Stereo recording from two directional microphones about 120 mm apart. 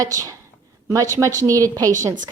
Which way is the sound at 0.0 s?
30° right (ahead or behind).